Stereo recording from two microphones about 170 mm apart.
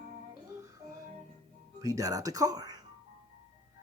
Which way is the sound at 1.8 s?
20° right (ahead or behind).